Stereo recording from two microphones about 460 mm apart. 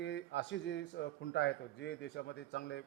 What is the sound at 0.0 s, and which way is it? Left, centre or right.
A man's voice, left.